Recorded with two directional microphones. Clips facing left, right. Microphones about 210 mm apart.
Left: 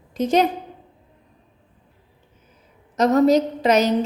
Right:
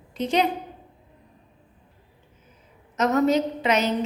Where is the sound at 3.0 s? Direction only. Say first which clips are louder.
Left 5 dB; 35° left (ahead or behind).